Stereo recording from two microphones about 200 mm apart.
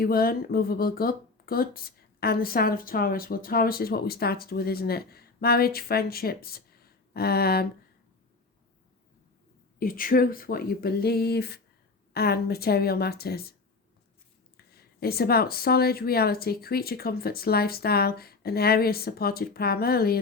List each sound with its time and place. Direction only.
0.0 s speech: 50° left (ahead or behind)
9.7 s speech: 45° left (ahead or behind)
14.5 s speech: 50° left (ahead or behind)